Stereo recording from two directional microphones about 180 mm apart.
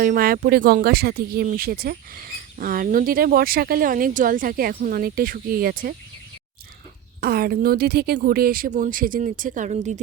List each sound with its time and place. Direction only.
0.0 s speech: 55° right (ahead or behind)
7.2 s speech: 55° right (ahead or behind)